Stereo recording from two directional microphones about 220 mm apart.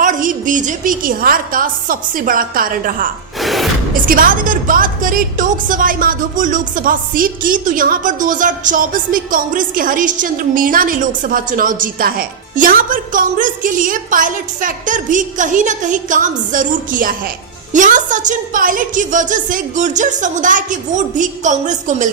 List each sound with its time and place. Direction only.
0.0 s a woman's voice: 35° right (ahead or behind)
3.4 s music: centre (ahead or behind)
4.1 s a woman's voice: 40° right (ahead or behind)